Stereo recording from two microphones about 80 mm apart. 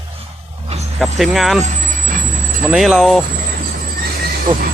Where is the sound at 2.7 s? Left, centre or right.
Centre.